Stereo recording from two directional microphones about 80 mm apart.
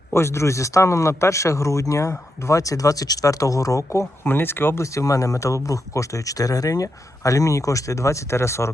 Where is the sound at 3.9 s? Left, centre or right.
Left.